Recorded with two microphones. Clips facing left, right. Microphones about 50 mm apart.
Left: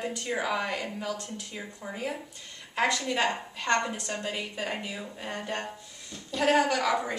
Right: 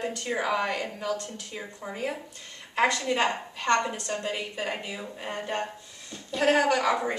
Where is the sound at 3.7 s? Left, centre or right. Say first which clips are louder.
Right 2 dB; centre.